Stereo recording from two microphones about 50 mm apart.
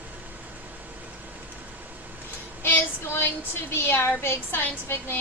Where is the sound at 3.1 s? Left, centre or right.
Left.